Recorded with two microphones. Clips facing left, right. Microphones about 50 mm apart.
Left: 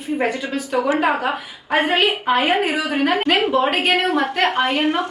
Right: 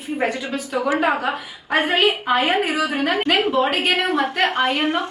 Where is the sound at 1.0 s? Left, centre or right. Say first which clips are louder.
Left 1 dB; centre.